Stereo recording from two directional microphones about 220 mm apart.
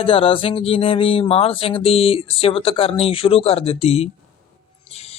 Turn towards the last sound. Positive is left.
turn(degrees=30)  # may be behind; listen again after turning